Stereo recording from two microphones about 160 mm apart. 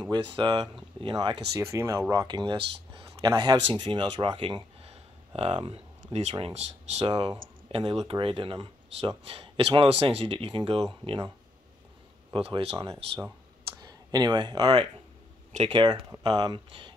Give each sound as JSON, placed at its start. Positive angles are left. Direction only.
{"t": 0.0, "sound": "speech", "side_deg": -30}
{"t": 12.4, "sound": "speech", "side_deg": -35}
{"t": 13.7, "sound": "speech", "side_deg": -25}